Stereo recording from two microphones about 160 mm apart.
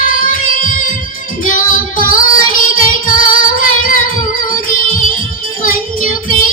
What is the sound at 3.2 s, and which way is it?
Female singing, 60° left (ahead or behind).